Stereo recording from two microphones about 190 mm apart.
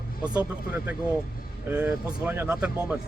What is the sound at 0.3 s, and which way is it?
Speech, 5° right (ahead or behind).